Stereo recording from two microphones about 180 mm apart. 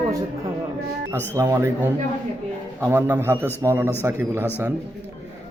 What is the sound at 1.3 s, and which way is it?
Speech, 15° right (ahead or behind).